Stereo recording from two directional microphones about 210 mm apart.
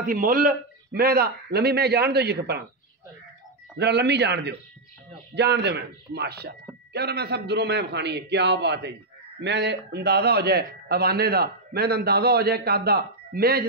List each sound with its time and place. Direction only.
0.0 s a man's voice: 40° right (ahead or behind)
3.7 s a man's voice: 50° right (ahead or behind)